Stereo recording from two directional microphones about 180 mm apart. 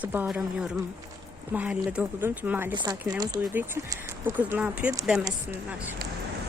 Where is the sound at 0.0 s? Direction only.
10° right (ahead or behind).